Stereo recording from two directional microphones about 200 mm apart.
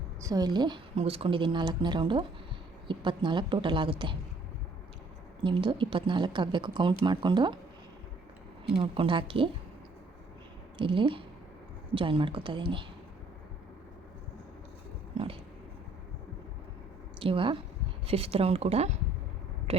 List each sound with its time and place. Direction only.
0.2 s speech: 20° right (ahead or behind)
5.4 s speech: 25° right (ahead or behind)
8.7 s speech: 25° right (ahead or behind)
10.8 s speech: 25° right (ahead or behind)
15.1 s a sound: 30° right (ahead or behind)
17.2 s speech: 25° right (ahead or behind)